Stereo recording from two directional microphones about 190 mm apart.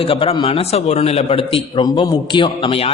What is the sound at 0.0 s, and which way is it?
A man's voice, 30° left (ahead or behind).